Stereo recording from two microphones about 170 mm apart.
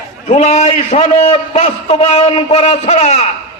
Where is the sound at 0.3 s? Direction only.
40° left (ahead or behind).